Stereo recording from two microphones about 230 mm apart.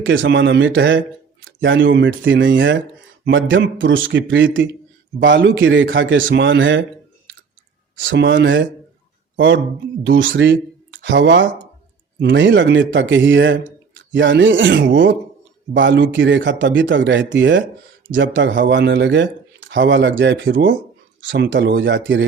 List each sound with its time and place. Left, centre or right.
0.0 s a man's voice: right
8.0 s a man's voice: right
10.0 s speech: right